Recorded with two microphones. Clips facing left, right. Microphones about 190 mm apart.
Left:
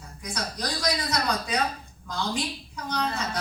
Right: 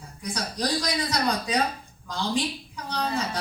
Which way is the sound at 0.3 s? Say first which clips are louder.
Right 4 dB; 30° right (ahead or behind).